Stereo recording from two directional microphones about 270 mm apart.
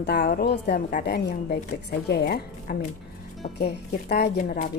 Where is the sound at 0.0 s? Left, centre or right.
Left.